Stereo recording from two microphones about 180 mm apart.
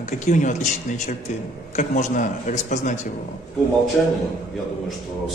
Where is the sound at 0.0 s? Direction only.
45° left (ahead or behind).